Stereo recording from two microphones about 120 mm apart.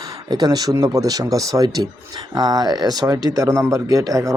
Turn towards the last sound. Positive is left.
turn(degrees=-30)  # may be behind; listen again after turning